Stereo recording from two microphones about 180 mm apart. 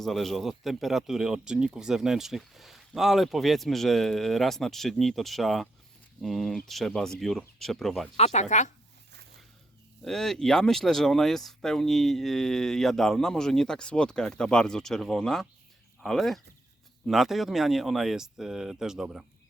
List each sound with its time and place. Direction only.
0.0 s speech: centre (ahead or behind)
8.1 s speech: 40° left (ahead or behind)
10.0 s speech: centre (ahead or behind)